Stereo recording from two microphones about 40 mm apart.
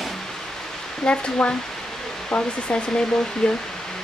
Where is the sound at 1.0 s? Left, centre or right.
Centre.